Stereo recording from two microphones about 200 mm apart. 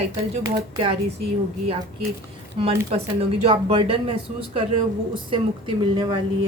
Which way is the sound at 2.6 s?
30° right (ahead or behind).